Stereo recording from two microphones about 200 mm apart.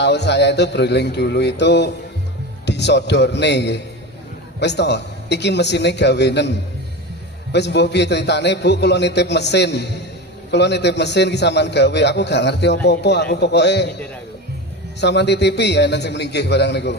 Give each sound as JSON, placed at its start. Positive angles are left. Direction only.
{"t": 0.0, "sound": "a man's voice", "side_deg": 60}
{"t": 15.0, "sound": "a man's voice", "side_deg": 60}